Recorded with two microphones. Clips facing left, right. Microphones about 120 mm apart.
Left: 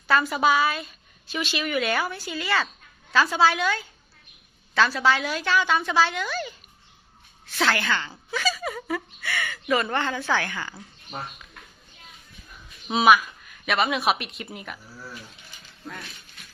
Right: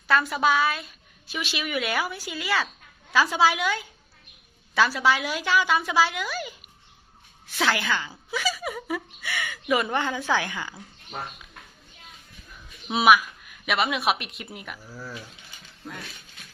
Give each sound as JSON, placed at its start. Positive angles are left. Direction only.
{"t": 0.1, "sound": "a woman's voice", "side_deg": 0}
{"t": 12.9, "sound": "speech", "side_deg": -5}